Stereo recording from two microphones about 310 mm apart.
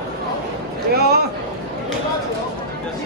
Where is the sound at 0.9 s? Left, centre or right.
Right.